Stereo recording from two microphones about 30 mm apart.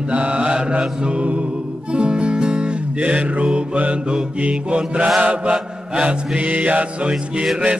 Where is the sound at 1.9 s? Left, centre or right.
Right.